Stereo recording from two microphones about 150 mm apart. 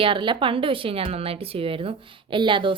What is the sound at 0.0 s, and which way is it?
Speech, 35° right (ahead or behind).